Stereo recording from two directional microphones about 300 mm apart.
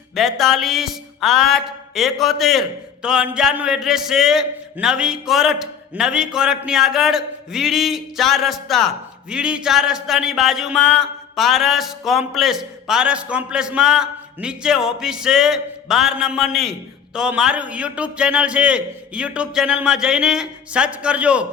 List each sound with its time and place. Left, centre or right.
0.2 s speech: centre